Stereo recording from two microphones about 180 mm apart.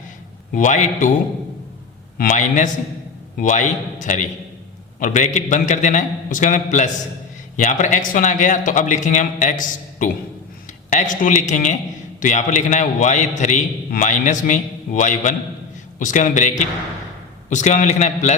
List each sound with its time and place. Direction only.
0.5 s a man's voice: 45° left (ahead or behind)
2.1 s a man's voice: 45° left (ahead or behind)